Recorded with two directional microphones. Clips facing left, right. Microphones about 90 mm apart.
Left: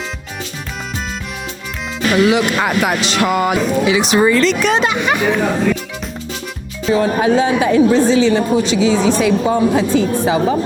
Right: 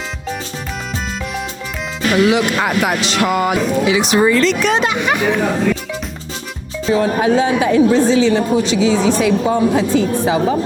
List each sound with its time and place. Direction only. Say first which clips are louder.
2.0 s speech: even; 20° left (ahead or behind)
6.9 s speech: left 1 dB; 25° left (ahead or behind)